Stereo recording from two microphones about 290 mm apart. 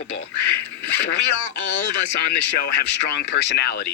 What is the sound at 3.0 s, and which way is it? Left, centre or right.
Speech, left.